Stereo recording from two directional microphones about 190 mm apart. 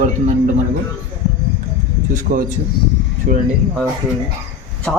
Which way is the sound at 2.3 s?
40° right (ahead or behind).